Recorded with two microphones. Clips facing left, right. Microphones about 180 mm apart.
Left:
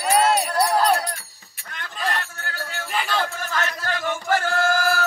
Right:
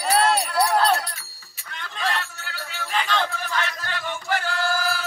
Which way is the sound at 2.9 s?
5° left (ahead or behind).